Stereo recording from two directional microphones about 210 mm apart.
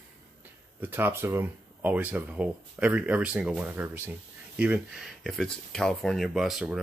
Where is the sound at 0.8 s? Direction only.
10° right (ahead or behind).